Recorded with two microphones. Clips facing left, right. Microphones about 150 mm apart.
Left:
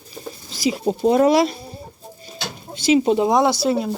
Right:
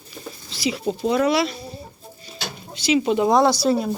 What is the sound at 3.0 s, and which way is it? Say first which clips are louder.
Speech: left 2 dB; 35° left (ahead or behind).